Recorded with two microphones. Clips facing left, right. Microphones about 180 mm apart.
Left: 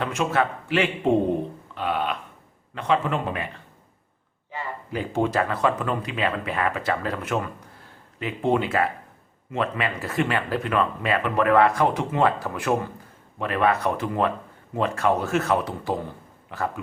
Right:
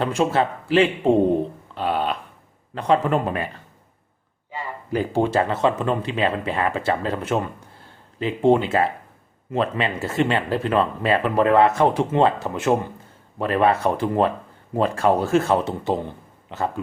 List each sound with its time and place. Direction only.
0.0 s speech: 30° right (ahead or behind)
4.5 s a sound: 15° right (ahead or behind)
4.9 s speech: 30° right (ahead or behind)